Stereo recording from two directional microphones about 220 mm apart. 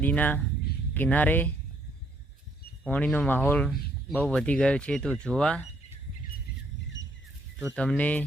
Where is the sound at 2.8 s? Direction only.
5° left (ahead or behind).